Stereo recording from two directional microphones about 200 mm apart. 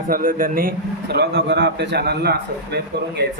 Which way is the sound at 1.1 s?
55° right (ahead or behind).